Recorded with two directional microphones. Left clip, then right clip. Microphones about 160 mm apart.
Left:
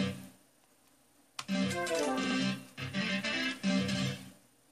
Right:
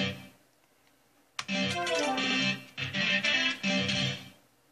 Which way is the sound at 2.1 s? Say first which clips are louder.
Right 5 dB; 50° left (ahead or behind).